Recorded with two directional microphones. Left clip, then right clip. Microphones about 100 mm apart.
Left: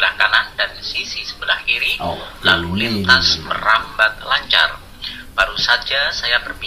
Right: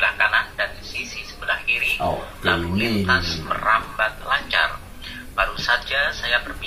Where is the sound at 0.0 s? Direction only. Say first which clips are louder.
Left 4 dB; 30° left (ahead or behind).